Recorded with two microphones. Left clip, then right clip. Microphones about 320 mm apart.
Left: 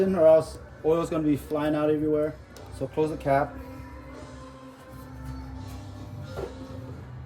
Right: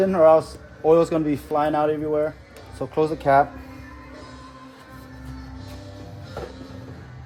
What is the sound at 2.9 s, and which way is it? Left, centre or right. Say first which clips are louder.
Speech: right 5 dB; right.